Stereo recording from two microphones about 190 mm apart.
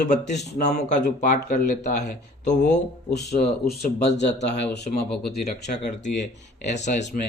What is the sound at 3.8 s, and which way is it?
Speech, 60° left (ahead or behind).